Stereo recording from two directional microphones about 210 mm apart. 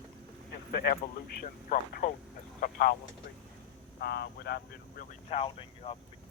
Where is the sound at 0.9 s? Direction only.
50° left (ahead or behind).